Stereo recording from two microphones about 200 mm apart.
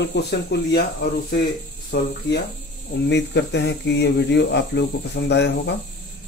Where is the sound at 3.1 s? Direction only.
60° left (ahead or behind).